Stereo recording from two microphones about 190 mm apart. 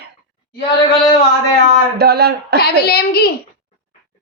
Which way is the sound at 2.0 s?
55° right (ahead or behind).